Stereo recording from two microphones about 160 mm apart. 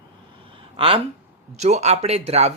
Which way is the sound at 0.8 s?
35° right (ahead or behind).